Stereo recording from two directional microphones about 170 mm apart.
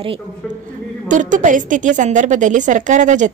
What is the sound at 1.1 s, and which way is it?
A woman's voice, 50° right (ahead or behind).